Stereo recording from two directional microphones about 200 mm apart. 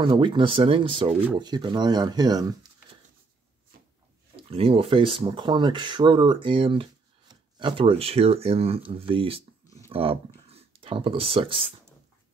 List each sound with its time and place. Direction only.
0.0 s speech: 25° right (ahead or behind)
4.4 s speech: 30° right (ahead or behind)